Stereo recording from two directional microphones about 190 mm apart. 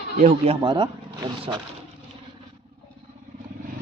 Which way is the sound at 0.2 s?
35° right (ahead or behind).